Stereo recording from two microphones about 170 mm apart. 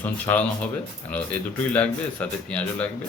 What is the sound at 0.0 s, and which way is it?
Speech, 10° left (ahead or behind).